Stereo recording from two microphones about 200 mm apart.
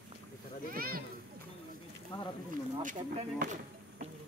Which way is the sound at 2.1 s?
25° left (ahead or behind).